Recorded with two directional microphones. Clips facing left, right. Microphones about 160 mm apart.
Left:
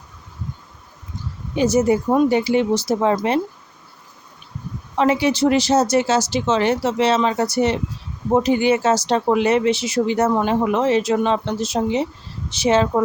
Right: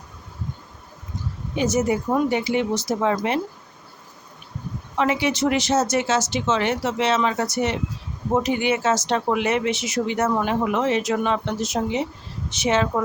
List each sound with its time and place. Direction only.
1.5 s speech: 35° left (ahead or behind)
4.9 s speech: 35° left (ahead or behind)